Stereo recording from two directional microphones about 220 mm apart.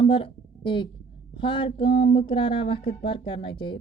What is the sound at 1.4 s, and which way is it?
Speech, 20° left (ahead or behind).